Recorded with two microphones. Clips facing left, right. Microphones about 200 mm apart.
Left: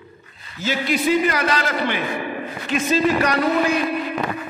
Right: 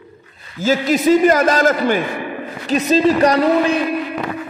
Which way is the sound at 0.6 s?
45° right (ahead or behind).